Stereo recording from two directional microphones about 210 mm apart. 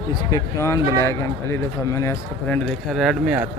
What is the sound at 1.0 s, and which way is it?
Speech, 15° left (ahead or behind).